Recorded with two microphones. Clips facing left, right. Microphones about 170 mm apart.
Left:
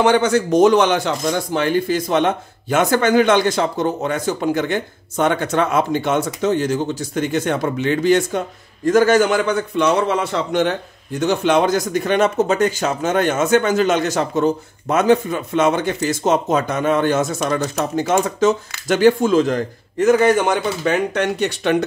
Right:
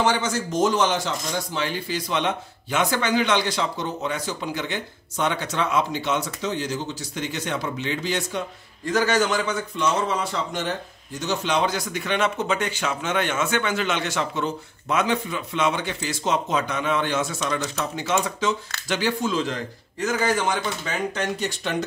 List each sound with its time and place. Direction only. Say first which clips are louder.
0.0 s a man's voice: left 8 dB; 60° left (ahead or behind)
11.1 s a man's voice: left 8 dB; 55° left (ahead or behind)